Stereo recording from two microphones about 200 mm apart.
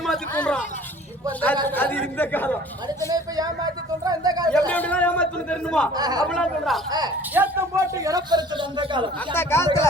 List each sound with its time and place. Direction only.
0.0 s speech: 5° left (ahead or behind)
1.6 s a man's voice: 10° left (ahead or behind)
3.1 s speech: 20° right (ahead or behind)
4.4 s a man's voice: 5° left (ahead or behind)
6.0 s speech: 20° right (ahead or behind)
6.2 s speech: 5° left (ahead or behind)
6.9 s a man's voice: 20° right (ahead or behind)
9.3 s a man's voice: 10° left (ahead or behind)